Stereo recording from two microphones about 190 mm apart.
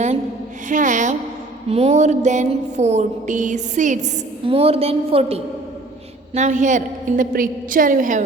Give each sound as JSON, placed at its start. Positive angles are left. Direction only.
{"t": 0.7, "sound": "music", "side_deg": -40}
{"t": 6.3, "sound": "a woman's voice", "side_deg": -40}